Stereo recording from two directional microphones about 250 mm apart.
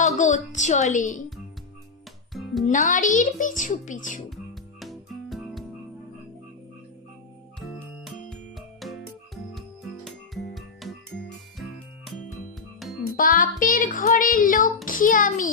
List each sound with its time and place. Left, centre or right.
0.0 s a woman's voice: left
2.3 s music: centre
2.6 s a child's voice: left
4.8 s music: centre
7.6 s music: centre
13.1 s a child's voice: left